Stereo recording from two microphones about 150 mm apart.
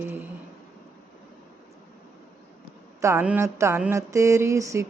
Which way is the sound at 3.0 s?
10° right (ahead or behind).